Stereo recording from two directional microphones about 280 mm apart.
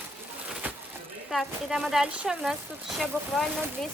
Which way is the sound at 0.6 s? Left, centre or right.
Centre.